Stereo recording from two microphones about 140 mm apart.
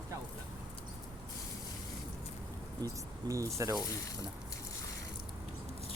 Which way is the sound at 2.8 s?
25° right (ahead or behind).